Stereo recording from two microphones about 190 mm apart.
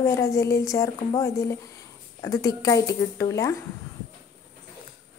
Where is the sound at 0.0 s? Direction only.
15° left (ahead or behind).